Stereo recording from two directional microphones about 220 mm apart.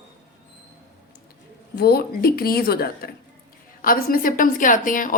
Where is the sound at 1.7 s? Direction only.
45° left (ahead or behind).